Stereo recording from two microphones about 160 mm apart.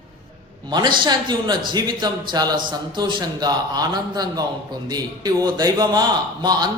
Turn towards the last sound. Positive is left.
turn(degrees=-25)  # may be behind; listen again after turning